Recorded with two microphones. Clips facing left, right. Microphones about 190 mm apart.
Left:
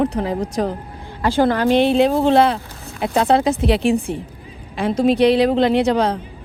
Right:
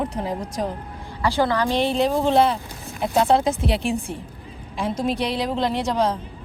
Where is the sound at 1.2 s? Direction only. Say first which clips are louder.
Left 5 dB; 50° left (ahead or behind).